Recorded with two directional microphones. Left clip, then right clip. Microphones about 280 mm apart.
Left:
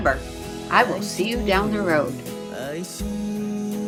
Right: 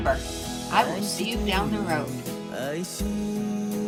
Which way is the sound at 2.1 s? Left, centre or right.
Centre.